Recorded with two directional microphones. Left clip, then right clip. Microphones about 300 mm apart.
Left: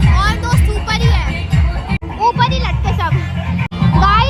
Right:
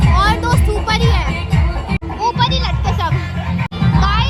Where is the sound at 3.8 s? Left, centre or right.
Centre.